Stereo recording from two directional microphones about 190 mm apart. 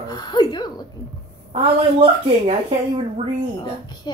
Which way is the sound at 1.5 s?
30° right (ahead or behind).